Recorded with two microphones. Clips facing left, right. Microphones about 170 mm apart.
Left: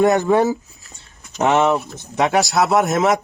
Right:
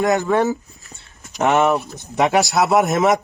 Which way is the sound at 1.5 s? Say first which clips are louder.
Even; centre (ahead or behind).